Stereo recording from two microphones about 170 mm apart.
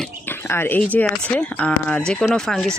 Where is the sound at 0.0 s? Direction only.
15° left (ahead or behind).